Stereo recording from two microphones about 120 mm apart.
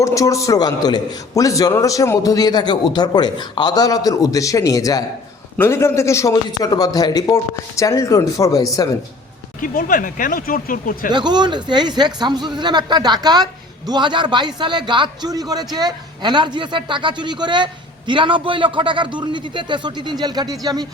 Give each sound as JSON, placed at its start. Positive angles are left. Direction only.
{"t": 0.0, "sound": "a man's voice", "side_deg": 25}
{"t": 5.5, "sound": "a man's voice", "side_deg": 20}
{"t": 11.1, "sound": "speech", "side_deg": -35}